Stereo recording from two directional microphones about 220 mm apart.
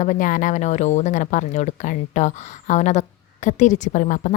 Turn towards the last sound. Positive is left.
turn(degrees=35)  # may be behind; listen again after turning